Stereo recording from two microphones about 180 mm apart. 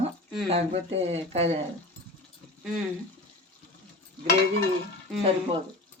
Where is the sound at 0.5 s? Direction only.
35° right (ahead or behind).